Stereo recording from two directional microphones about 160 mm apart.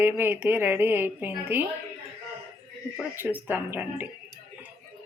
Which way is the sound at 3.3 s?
10° right (ahead or behind).